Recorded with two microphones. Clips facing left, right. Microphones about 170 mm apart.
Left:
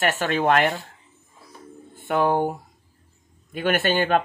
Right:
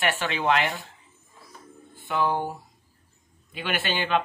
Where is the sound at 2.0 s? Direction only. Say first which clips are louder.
Left 5 dB; 55° left (ahead or behind).